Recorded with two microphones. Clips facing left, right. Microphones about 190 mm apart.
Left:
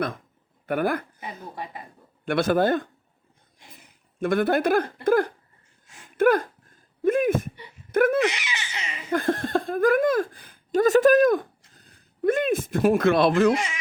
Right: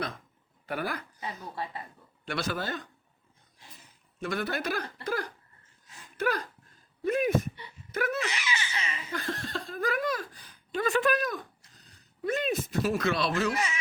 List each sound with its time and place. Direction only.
0.7 s speech: 55° left (ahead or behind)
1.5 s speech: 15° left (ahead or behind)
2.2 s speech: 55° left (ahead or behind)
3.6 s a sound: 15° left (ahead or behind)
4.2 s speech: 55° left (ahead or behind)
8.3 s baby laughter: 15° left (ahead or behind)
9.0 s speech: 50° left (ahead or behind)